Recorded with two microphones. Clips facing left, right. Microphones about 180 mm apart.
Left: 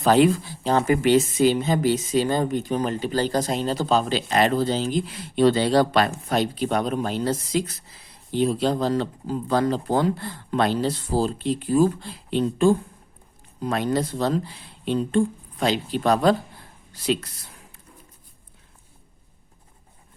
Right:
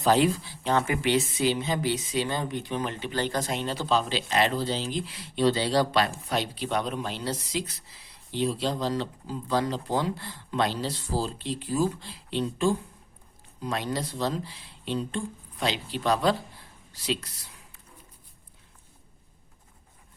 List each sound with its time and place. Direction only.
0.0 s speech: 55° left (ahead or behind)